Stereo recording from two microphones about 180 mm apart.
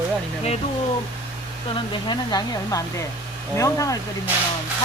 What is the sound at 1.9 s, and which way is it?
Speech, 25° left (ahead or behind).